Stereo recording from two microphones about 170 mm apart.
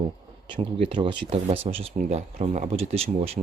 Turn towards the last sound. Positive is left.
turn(degrees=-35)  # may be behind; listen again after turning